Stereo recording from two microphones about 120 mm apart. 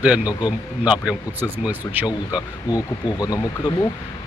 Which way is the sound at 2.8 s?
30° left (ahead or behind).